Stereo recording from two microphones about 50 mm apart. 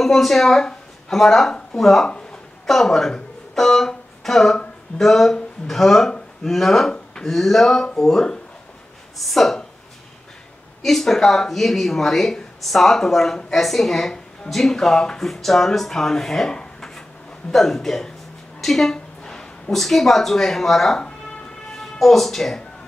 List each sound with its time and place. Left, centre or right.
0.0 s speech: centre
2.0 s a sound: centre
2.7 s speech: centre
10.8 s a woman's voice: centre
21.6 s music: centre